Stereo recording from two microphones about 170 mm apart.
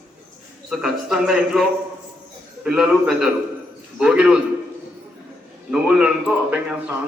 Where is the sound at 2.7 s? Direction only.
5° right (ahead or behind).